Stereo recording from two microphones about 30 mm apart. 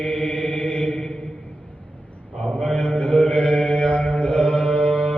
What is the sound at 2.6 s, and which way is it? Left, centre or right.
Mantra, left.